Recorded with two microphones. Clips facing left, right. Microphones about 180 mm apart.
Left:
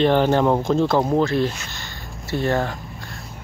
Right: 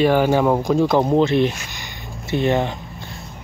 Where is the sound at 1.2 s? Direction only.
20° right (ahead or behind).